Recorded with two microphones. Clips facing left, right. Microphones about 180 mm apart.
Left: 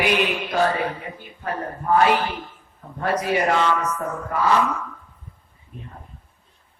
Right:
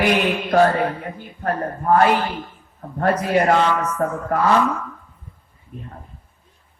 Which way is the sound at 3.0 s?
50° right (ahead or behind).